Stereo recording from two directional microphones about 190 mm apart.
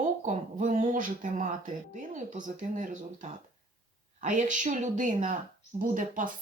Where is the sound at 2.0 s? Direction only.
40° right (ahead or behind).